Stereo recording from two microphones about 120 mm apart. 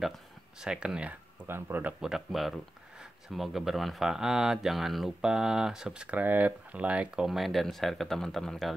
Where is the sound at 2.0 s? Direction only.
Centre (ahead or behind).